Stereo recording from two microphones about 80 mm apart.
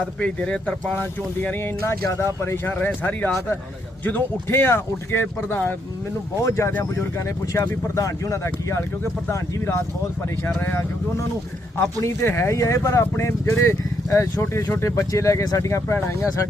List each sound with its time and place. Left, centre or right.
0.0 s speech: centre
0.9 s speech: left
6.4 s speech: left
11.9 s speech: left